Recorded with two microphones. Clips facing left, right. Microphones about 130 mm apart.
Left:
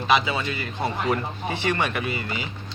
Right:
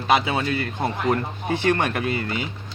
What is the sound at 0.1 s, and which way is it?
Speech, 55° right (ahead or behind).